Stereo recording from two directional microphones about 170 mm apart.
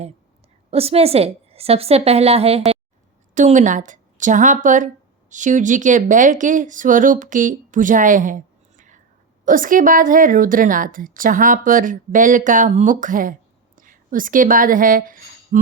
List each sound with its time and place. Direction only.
0.7 s a woman's voice: 35° right (ahead or behind); by 15.2 s 55° right (ahead or behind)